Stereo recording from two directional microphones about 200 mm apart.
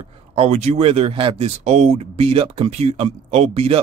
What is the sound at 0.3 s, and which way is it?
Speech, 30° right (ahead or behind).